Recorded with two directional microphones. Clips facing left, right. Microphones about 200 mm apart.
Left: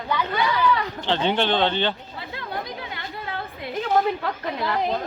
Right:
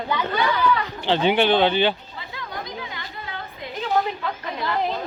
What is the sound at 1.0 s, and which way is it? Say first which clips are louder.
Speech: right 4 dB; 10° right (ahead or behind).